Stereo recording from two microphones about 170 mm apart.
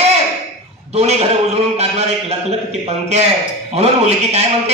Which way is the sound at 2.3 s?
40° right (ahead or behind).